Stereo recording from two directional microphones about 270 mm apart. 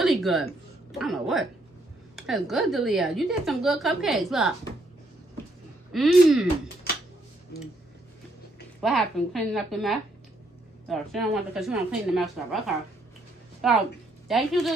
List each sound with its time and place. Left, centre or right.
0.0 s a woman's voice: centre
5.9 s a woman's voice: centre
6.9 s a sound: left
8.8 s a woman's voice: centre
13.6 s a woman's voice: centre